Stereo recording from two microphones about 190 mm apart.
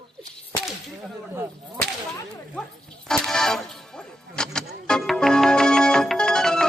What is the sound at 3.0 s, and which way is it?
Music, 5° left (ahead or behind).